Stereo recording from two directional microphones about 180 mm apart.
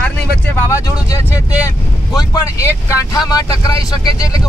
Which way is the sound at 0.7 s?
15° left (ahead or behind).